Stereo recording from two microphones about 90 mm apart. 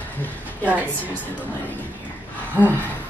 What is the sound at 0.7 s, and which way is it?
Speech, 15° right (ahead or behind).